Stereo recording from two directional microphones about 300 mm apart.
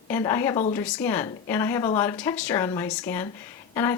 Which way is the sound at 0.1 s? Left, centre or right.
Centre.